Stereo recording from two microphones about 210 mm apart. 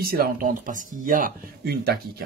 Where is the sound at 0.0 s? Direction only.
45° right (ahead or behind).